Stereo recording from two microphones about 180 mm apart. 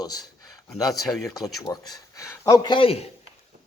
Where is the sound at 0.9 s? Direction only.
Centre (ahead or behind).